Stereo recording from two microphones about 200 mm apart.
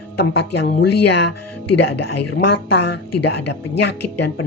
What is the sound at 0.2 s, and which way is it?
Speech, 55° left (ahead or behind).